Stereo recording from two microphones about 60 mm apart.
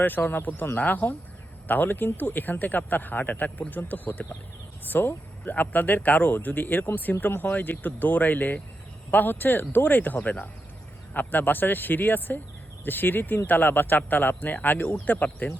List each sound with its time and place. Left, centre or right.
0.0 s speech: left